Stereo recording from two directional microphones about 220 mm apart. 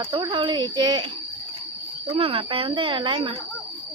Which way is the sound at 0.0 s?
20° right (ahead or behind).